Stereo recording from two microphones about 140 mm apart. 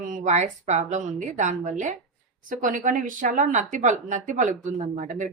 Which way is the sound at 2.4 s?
75° right (ahead or behind).